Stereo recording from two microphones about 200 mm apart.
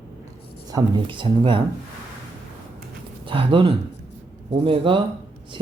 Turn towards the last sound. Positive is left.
turn(degrees=-25)  # may be behind; listen again after turning